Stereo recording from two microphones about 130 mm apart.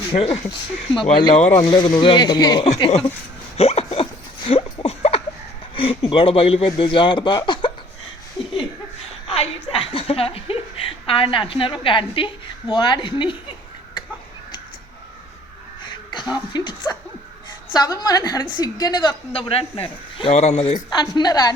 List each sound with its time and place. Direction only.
0.1 s a woman's voice: 45° left (ahead or behind)
3.6 s dog: 50° left (ahead or behind)
4.4 s a sound: 45° left (ahead or behind)
5.7 s speech: 45° left (ahead or behind)
9.3 s a sound: 50° left (ahead or behind)
15.8 s a woman's voice: 35° left (ahead or behind)
19.3 s speech: 45° left (ahead or behind)
21.0 s a woman's voice: 30° left (ahead or behind)